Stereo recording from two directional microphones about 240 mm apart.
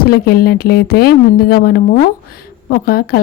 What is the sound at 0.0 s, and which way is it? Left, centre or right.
Speech, left.